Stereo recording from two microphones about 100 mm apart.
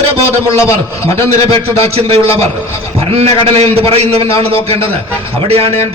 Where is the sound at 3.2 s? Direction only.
90° right.